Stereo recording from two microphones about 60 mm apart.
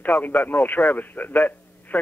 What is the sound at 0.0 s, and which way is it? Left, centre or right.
A man's voice, left.